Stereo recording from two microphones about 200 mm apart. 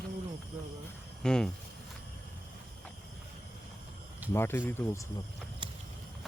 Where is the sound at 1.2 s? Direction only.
5° left (ahead or behind).